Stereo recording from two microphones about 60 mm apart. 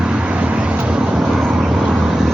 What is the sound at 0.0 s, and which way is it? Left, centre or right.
Vehicle, centre.